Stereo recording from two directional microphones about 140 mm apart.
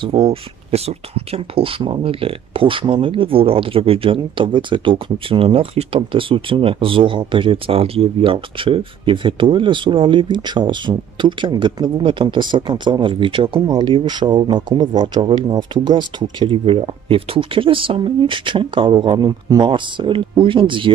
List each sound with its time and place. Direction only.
0.0 s speech: 40° right (ahead or behind)